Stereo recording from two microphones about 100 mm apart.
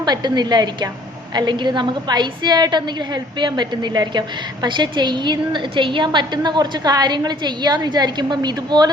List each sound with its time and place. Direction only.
0.0 s a woman's voice: 45° right (ahead or behind)